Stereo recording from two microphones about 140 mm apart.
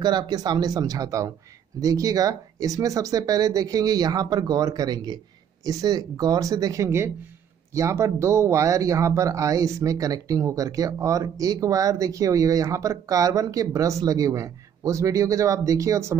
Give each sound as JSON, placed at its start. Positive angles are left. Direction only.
{"t": 0.0, "sound": "speech", "side_deg": -30}